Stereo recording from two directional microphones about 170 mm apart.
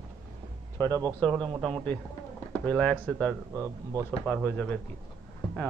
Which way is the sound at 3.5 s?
20° right (ahead or behind).